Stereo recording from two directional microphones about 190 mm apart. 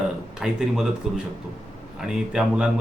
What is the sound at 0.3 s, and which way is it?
Speech, 5° right (ahead or behind).